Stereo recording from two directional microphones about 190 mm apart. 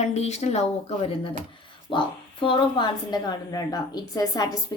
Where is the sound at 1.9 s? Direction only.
25° left (ahead or behind).